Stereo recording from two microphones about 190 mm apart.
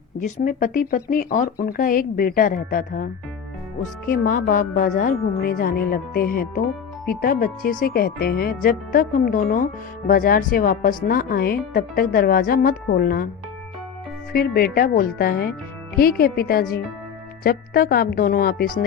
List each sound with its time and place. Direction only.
0.3 s speech: 45° left (ahead or behind)
4.1 s speech: 50° left (ahead or behind)
14.3 s speech: 50° left (ahead or behind)